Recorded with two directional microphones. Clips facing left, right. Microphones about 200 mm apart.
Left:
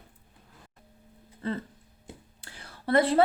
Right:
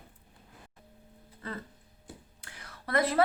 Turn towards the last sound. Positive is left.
turn(degrees=30)  # may be behind; listen again after turning